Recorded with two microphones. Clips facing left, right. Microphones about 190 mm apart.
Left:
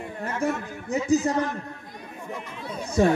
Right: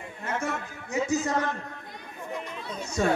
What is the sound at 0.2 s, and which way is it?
A man's voice, 35° left (ahead or behind).